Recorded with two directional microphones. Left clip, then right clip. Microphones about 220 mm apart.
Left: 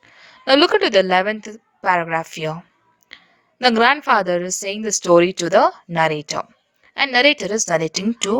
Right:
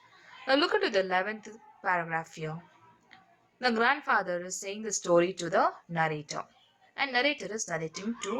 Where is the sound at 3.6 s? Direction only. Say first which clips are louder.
Left 12 dB; 40° left (ahead or behind).